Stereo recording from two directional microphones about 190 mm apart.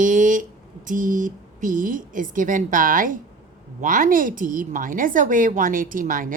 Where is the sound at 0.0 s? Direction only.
45° right (ahead or behind).